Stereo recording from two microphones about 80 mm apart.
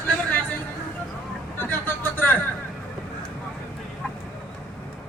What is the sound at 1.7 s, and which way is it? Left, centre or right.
Vehicle, left.